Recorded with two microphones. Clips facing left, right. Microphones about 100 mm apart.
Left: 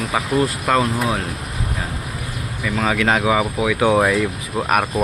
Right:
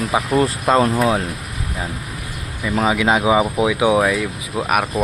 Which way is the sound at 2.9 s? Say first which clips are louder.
Right 1 dB; 15° right (ahead or behind).